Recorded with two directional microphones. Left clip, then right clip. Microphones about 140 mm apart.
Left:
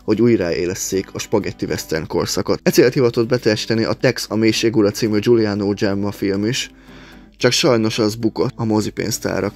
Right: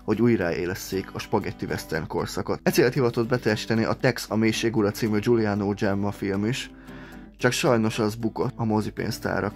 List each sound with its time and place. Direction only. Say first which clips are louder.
0.0 s speech: left 7 dB; 15° left (ahead or behind)